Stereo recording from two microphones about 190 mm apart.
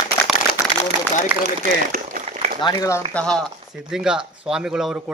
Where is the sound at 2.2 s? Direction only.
35° right (ahead or behind).